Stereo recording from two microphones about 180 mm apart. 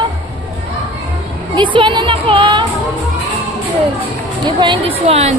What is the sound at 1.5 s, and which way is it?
Music, 25° right (ahead or behind).